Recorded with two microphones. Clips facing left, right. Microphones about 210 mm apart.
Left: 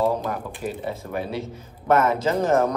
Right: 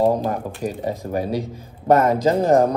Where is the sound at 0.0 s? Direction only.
40° right (ahead or behind).